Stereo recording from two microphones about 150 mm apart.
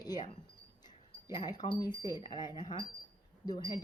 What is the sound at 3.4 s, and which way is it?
Speech, 30° left (ahead or behind).